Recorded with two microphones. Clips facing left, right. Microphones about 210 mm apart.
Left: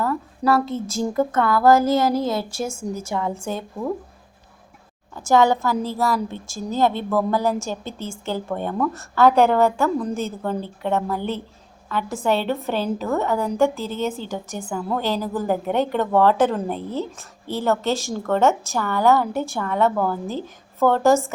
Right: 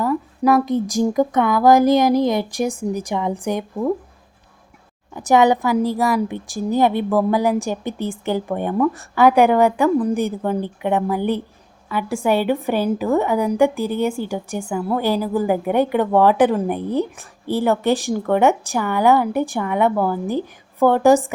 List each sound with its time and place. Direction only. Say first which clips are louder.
0.0 s a woman's voice: right 4 dB; 15° right (ahead or behind)
5.1 s a woman's voice: right 2 dB; 15° right (ahead or behind)